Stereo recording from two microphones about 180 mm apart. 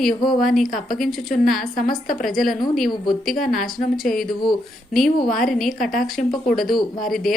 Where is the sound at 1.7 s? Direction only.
50° left (ahead or behind).